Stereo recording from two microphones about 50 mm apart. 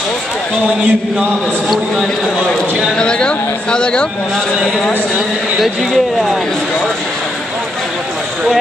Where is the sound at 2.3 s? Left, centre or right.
Centre.